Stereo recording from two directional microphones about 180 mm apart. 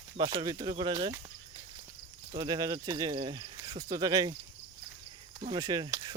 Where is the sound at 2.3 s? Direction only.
20° right (ahead or behind).